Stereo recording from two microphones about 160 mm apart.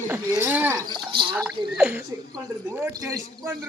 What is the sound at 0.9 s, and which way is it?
Speech, 30° right (ahead or behind).